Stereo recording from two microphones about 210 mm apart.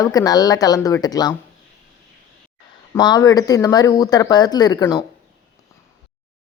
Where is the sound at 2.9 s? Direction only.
15° left (ahead or behind).